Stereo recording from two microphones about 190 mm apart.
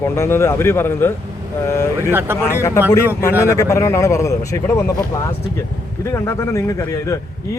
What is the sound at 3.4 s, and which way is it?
Speech, 15° left (ahead or behind).